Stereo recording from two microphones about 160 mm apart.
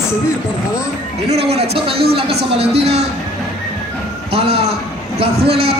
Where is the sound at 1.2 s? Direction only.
40° right (ahead or behind).